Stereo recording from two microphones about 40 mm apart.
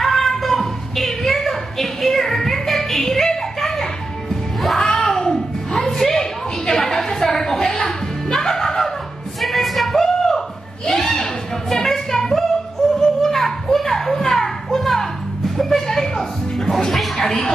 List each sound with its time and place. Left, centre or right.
0.0 s a sound: centre
4.7 s music: centre
9.4 s a sound: centre
11.7 s music: centre
13.2 s children playing: centre
15.5 s music: centre